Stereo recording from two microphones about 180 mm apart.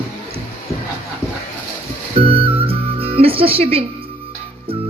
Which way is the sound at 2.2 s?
30° right (ahead or behind).